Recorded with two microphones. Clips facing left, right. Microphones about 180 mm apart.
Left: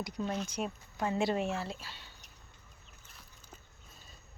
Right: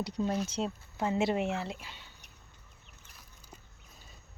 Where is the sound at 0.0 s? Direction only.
30° right (ahead or behind).